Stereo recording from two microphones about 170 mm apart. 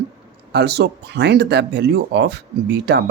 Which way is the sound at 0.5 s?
80° right.